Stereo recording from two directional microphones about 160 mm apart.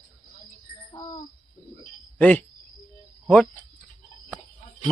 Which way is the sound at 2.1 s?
10° left (ahead or behind).